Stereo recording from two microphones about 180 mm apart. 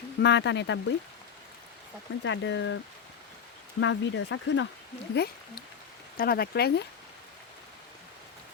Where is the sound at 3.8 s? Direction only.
90° left.